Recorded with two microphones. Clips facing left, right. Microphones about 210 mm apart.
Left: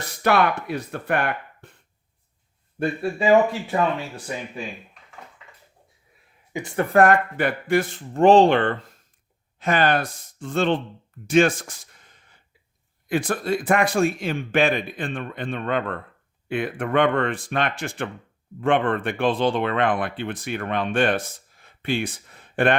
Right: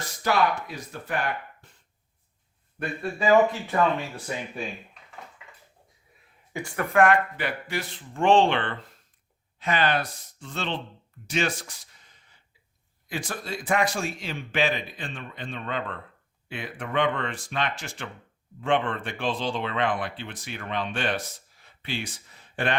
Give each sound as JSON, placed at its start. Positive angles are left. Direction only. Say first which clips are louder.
{"t": 0.2, "sound": "speech", "louder": "left 4 dB", "side_deg": 65}
{"t": 2.7, "sound": "speech", "louder": "left 6 dB", "side_deg": 25}
{"t": 6.5, "sound": "speech", "louder": "left 6 dB", "side_deg": 20}
{"t": 6.9, "sound": "speech", "louder": "left 3 dB", "side_deg": 40}
{"t": 11.3, "sound": "a sound", "louder": "left 10 dB", "side_deg": 50}
{"t": 13.1, "sound": "speech", "louder": "left 10 dB", "side_deg": 55}